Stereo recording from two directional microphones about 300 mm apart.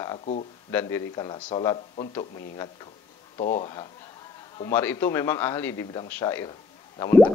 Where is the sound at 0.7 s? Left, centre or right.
Centre.